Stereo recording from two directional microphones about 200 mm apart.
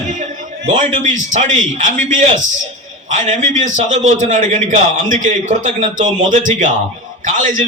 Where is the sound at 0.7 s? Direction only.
40° right (ahead or behind).